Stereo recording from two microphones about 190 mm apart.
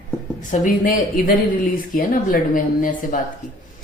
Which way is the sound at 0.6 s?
45° left (ahead or behind).